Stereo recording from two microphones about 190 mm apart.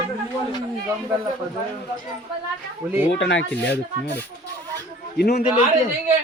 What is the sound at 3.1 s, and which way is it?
Speech, 70° left (ahead or behind).